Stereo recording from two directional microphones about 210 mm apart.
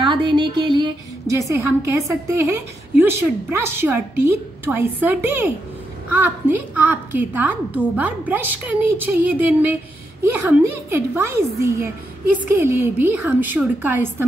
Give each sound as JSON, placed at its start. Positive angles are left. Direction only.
{"t": 0.0, "sound": "a woman's voice", "side_deg": -20}